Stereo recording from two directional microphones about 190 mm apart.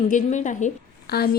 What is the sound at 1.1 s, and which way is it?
Speech, 55° left (ahead or behind).